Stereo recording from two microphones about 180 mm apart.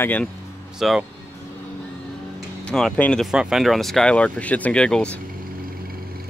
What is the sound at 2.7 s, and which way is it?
Speech, 5° left (ahead or behind).